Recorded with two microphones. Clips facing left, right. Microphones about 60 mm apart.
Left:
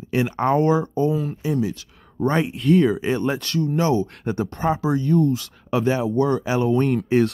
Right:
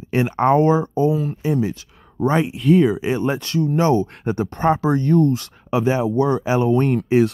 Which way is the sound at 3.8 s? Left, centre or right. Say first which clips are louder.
Right 4 dB; right.